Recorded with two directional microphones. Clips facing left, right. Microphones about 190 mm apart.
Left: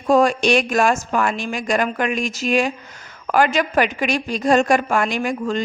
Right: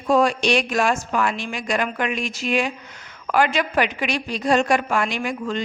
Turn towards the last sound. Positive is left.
turn(degrees=45)  # may be behind; listen again after turning